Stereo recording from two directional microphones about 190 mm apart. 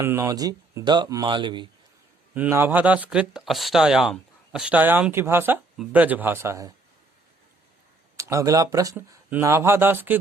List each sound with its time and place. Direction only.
0.0 s speech: 15° right (ahead or behind)
2.3 s speech: 10° right (ahead or behind)
8.1 s speech: 15° right (ahead or behind)